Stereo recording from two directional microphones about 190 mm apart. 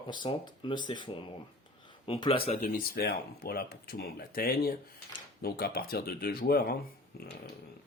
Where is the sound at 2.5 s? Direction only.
45° left (ahead or behind).